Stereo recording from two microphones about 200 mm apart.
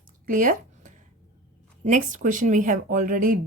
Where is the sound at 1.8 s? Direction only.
40° right (ahead or behind).